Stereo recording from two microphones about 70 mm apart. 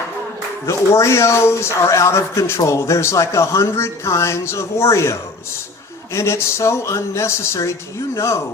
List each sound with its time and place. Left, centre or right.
0.7 s speech: left
6.1 s speech: left